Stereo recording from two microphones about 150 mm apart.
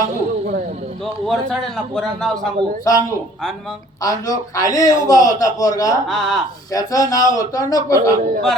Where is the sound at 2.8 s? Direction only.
20° left (ahead or behind).